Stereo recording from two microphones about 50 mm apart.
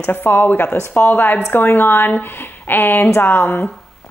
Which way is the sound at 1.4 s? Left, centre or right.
Left.